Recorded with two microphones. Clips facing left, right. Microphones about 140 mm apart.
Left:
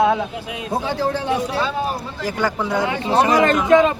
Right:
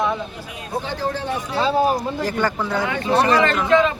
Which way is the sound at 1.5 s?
30° right (ahead or behind).